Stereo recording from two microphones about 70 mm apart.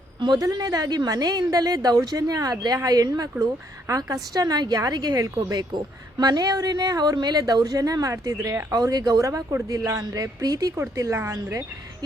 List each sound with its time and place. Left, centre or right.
0.2 s a woman's voice: right
3.8 s speech: right
4.4 s a woman's voice: right
8.7 s a woman's voice: right
10.9 s speech: right